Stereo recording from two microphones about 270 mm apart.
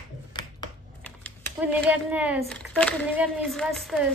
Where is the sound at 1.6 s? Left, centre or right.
Centre.